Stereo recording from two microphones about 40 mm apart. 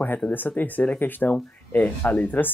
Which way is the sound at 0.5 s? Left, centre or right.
Left.